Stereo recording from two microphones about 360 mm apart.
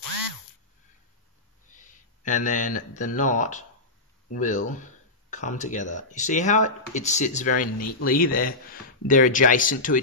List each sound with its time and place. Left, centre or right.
1.7 s speech: left